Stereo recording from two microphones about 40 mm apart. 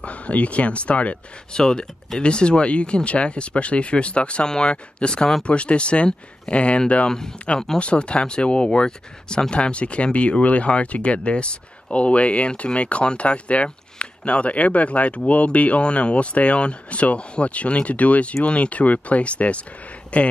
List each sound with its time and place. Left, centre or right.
0.0 s speech: left
1.5 s speech: centre